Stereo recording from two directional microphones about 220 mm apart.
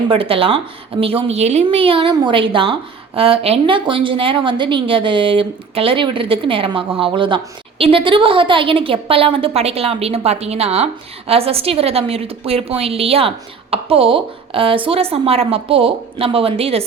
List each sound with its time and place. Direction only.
0.1 s a woman's voice: 25° right (ahead or behind)